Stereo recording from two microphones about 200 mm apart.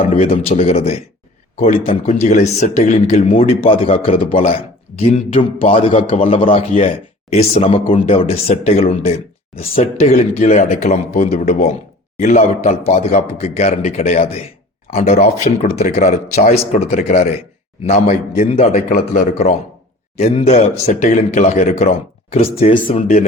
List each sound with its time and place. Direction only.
0.1 s a man's voice: 30° left (ahead or behind)
10.1 s a man's voice: 40° left (ahead or behind)
18.5 s a man's voice: 30° left (ahead or behind)